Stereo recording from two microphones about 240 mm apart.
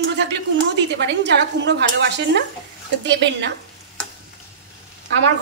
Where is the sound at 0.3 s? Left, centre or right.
Right.